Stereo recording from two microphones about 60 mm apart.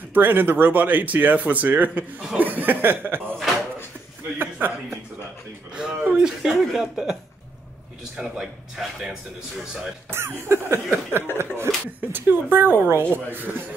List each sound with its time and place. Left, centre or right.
0.1 s speech: right
4.4 s speech: right
5.7 s speech: centre
8.2 s speech: centre
8.8 s speech: centre
10.1 s cough: right
11.3 s speech: right